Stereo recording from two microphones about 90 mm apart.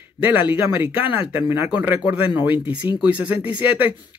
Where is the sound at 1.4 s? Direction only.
30° right (ahead or behind).